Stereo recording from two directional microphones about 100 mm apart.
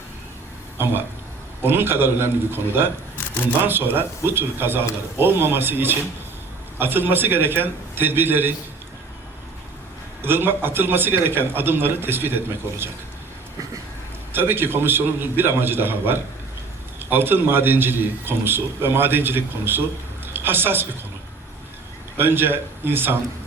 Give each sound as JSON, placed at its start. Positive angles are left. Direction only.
{"t": 1.6, "sound": "a man's voice", "side_deg": -20}
{"t": 10.2, "sound": "a man's voice", "side_deg": -20}
{"t": 14.3, "sound": "a man's voice", "side_deg": -20}
{"t": 22.2, "sound": "a man's voice", "side_deg": -20}